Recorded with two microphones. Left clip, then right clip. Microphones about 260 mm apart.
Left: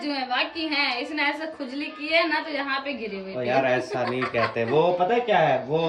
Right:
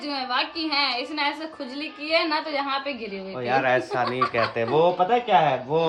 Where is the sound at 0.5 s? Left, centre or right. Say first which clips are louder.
Right 1 dB; centre.